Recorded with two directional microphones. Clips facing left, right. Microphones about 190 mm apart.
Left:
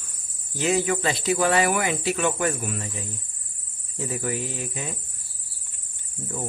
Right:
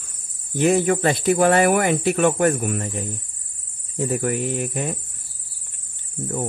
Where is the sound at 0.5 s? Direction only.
55° right (ahead or behind).